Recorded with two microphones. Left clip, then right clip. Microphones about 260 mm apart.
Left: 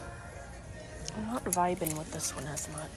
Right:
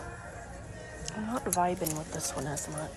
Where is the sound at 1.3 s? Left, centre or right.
Centre.